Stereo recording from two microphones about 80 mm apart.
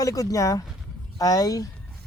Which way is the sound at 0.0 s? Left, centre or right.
Left.